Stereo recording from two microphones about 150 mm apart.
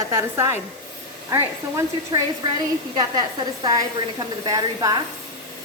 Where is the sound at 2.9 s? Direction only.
30° right (ahead or behind).